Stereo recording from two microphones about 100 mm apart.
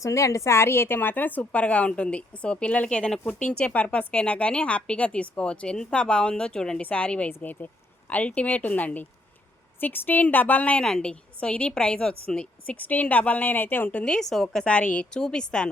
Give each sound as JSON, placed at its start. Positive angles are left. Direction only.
{"t": 0.0, "sound": "a woman's voice", "side_deg": 30}
{"t": 14.0, "sound": "a woman's voice", "side_deg": 5}